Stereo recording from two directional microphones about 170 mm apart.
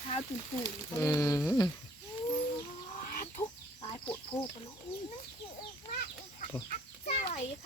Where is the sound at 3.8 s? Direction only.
30° left (ahead or behind).